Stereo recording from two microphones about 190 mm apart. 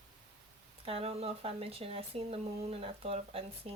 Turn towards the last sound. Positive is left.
turn(degrees=-30)  # may be behind; listen again after turning